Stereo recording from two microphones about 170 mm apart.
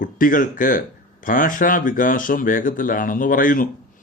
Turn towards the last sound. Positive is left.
turn(degrees=55)  # may be behind; listen again after turning